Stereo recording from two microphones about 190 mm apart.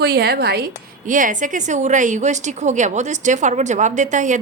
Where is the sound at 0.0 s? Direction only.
55° right (ahead or behind).